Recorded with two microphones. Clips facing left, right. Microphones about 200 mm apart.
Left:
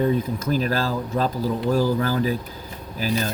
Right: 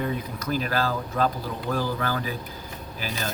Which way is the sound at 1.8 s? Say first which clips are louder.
Left 7 dB; 40° left (ahead or behind).